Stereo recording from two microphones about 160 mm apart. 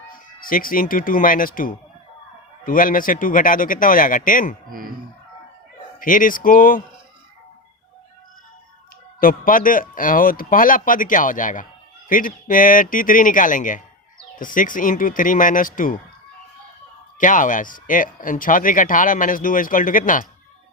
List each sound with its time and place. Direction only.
0.1 s speech: 60° left (ahead or behind)
6.0 s speech: 60° left (ahead or behind)
9.2 s speech: 60° left (ahead or behind)
17.2 s speech: 55° left (ahead or behind)